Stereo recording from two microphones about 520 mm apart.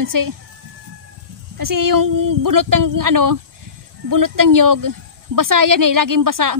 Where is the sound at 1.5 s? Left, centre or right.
Right.